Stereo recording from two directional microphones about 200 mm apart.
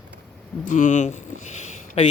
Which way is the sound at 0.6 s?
40° left (ahead or behind).